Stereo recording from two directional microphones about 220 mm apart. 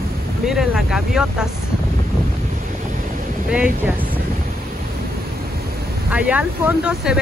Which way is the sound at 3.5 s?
5° right (ahead or behind).